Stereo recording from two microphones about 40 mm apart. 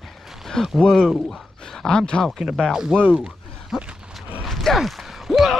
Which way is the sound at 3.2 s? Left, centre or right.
Right.